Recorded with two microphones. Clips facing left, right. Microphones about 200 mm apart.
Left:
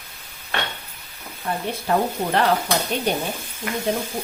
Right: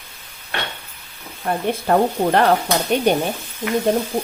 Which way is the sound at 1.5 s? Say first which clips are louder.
Right 5 dB; 55° right (ahead or behind).